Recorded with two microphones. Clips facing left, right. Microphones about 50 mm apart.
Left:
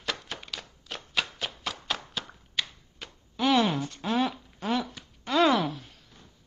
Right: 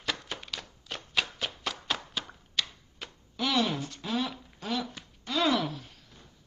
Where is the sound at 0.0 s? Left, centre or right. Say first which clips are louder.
Even; centre.